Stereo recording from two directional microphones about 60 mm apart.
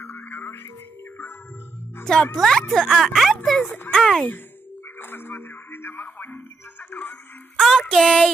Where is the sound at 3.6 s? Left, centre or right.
Left.